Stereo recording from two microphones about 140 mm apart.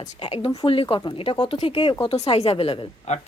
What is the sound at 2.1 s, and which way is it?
A woman's voice, 50° left (ahead or behind).